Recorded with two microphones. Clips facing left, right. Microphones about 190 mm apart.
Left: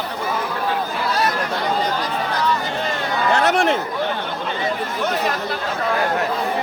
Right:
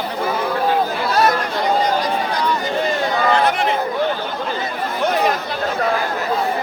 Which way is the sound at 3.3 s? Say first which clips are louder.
Left 4 dB; 75° left (ahead or behind).